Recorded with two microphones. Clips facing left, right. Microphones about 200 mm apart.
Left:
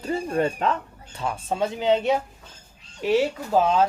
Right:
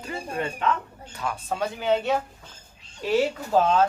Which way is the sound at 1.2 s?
25° left (ahead or behind).